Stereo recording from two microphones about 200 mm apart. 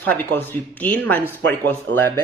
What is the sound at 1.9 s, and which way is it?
Speech, 70° right (ahead or behind).